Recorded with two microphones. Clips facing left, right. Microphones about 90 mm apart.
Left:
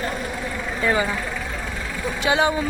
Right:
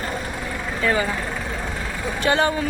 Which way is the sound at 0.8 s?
20° left (ahead or behind).